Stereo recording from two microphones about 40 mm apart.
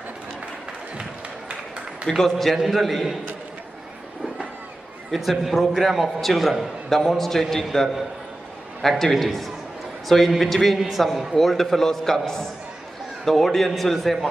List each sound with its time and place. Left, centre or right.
2.0 s a man's voice: centre
5.1 s a man's voice: centre